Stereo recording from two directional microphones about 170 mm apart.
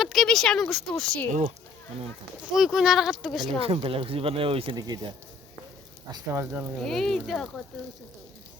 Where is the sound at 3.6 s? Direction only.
35° right (ahead or behind).